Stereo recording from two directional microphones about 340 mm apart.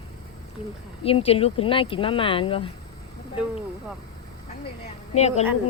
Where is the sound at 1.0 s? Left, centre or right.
Centre.